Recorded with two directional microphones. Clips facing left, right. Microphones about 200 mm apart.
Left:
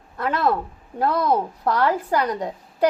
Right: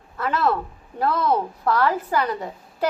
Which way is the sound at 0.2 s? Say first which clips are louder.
Left 1 dB; 15° left (ahead or behind).